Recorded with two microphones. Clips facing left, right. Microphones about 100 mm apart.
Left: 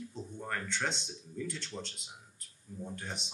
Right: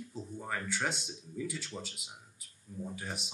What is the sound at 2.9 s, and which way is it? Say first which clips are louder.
Speech: right 1 dB; 5° right (ahead or behind).